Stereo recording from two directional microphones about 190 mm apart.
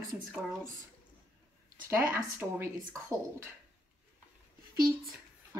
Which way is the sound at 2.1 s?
15° right (ahead or behind).